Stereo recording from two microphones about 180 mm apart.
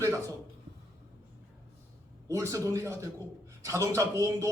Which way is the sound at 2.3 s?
20° right (ahead or behind).